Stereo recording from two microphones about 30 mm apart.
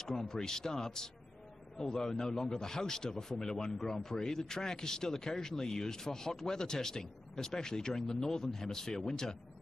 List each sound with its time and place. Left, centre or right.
0.2 s speech: centre